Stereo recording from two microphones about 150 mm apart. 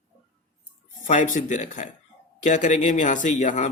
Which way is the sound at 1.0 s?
60° left (ahead or behind).